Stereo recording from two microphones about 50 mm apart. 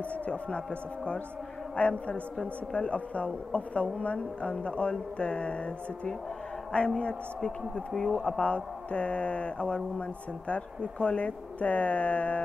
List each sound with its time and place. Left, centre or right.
0.1 s a woman's voice: left
8.2 s a woman's voice: left